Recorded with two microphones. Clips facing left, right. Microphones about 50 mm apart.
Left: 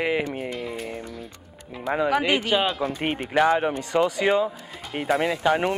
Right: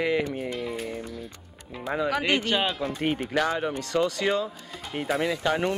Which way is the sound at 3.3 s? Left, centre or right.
Left.